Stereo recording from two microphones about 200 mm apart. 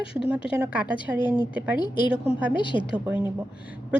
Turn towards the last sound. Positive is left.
turn(degrees=-5)  # may be behind; listen again after turning